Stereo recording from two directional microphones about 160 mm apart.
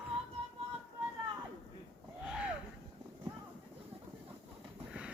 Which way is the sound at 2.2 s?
5° right (ahead or behind).